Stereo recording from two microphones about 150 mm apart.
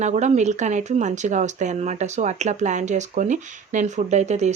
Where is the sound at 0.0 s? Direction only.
50° right (ahead or behind).